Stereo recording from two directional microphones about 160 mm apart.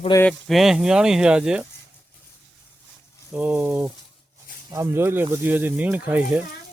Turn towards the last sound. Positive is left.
turn(degrees=-10)  # may be behind; listen again after turning